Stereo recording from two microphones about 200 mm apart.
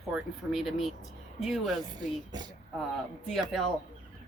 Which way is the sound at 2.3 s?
20° right (ahead or behind).